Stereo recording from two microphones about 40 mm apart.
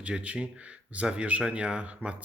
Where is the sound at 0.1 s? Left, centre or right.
Centre.